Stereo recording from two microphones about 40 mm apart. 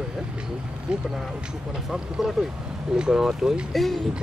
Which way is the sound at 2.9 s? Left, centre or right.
Centre.